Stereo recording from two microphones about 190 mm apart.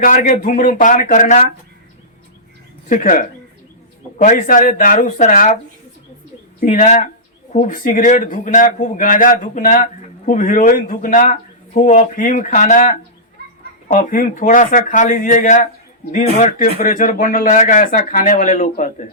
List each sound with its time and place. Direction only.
0.0 s a man's voice: 45° left (ahead or behind)
2.9 s a man's voice: 45° left (ahead or behind)
6.6 s a man's voice: 40° left (ahead or behind)